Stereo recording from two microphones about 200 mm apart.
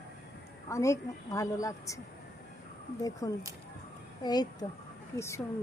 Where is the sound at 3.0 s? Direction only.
20° left (ahead or behind).